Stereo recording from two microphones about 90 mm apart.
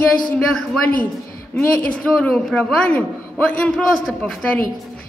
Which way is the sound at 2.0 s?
10° left (ahead or behind).